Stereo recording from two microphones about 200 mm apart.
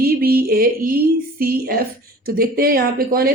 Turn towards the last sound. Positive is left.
turn(degrees=-50)  # may be behind; listen again after turning